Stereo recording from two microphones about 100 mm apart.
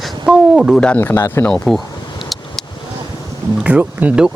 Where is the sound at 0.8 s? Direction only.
15° left (ahead or behind).